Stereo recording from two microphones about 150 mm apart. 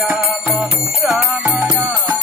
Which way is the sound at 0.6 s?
Centre (ahead or behind).